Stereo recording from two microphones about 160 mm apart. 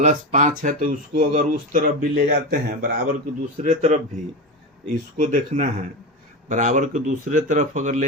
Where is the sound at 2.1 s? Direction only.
80° right.